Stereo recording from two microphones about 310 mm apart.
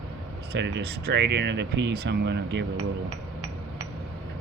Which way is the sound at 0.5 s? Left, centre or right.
Right.